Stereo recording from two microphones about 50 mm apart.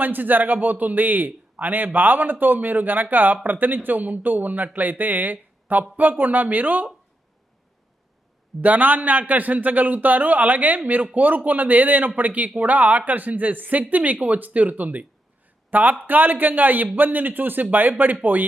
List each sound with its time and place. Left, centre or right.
0.0 s a man's voice: right
8.6 s a man's voice: right